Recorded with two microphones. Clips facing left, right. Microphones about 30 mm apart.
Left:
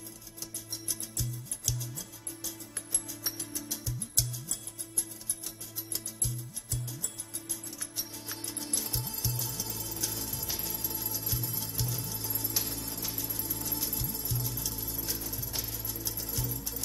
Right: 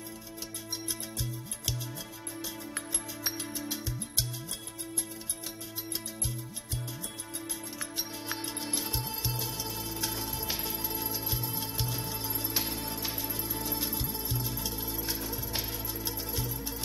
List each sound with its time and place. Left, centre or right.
0.8 s music: right
3.3 s music: right
7.8 s music: right